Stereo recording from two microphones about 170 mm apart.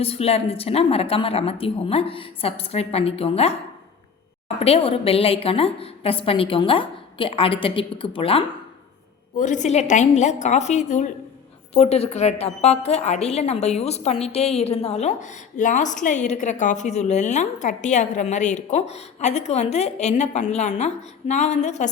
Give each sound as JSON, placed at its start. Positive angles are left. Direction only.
{"t": 0.0, "sound": "a woman's voice", "side_deg": 35}
{"t": 9.4, "sound": "a woman's voice", "side_deg": 45}